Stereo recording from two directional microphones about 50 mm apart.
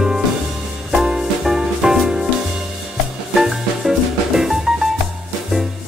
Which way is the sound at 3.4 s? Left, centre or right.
Centre.